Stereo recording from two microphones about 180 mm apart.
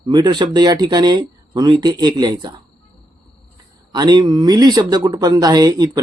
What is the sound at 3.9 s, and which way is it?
Speech, 20° right (ahead or behind).